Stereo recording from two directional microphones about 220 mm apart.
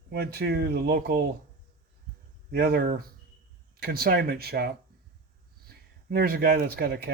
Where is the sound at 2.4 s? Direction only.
45° right (ahead or behind).